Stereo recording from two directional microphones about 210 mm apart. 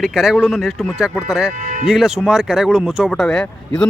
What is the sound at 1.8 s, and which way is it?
Speech, centre (ahead or behind).